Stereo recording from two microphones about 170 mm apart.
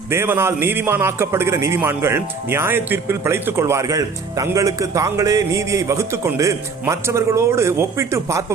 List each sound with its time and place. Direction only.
0.1 s a man's voice: 15° right (ahead or behind)